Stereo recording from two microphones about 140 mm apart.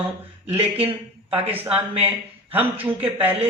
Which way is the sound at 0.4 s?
45° right (ahead or behind).